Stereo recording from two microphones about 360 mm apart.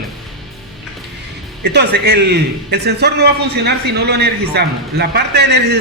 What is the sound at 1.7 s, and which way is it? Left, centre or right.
A man's voice, right.